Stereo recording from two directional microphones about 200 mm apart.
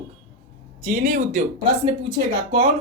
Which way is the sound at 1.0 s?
40° right (ahead or behind).